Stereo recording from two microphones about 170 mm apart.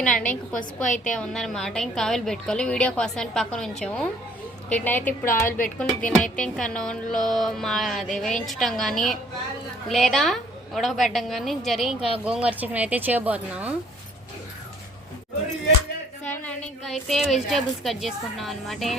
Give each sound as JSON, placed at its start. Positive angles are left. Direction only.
{"t": 0.0, "sound": "a woman's voice", "side_deg": 5}
{"t": 0.9, "sound": "speech", "side_deg": 45}
{"t": 1.1, "sound": "music", "side_deg": 5}
{"t": 4.7, "sound": "a woman's voice", "side_deg": 10}
{"t": 5.5, "sound": "speech", "side_deg": 55}
{"t": 6.1, "sound": "music", "side_deg": 5}
{"t": 12.2, "sound": "a woman's voice", "side_deg": -5}
{"t": 16.3, "sound": "a woman's voice", "side_deg": 10}
{"t": 16.8, "sound": "music", "side_deg": 0}